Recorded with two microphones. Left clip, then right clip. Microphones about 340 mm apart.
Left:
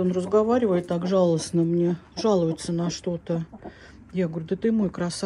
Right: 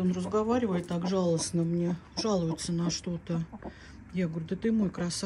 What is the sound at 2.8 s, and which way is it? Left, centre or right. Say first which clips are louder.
Speech: left 6 dB; centre.